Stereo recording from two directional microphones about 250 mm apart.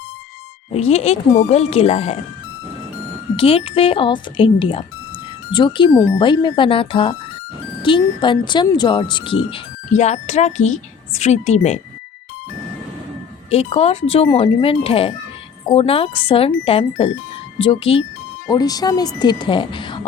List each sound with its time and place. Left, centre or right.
0.7 s speech: left
3.3 s speech: left
13.5 s speech: left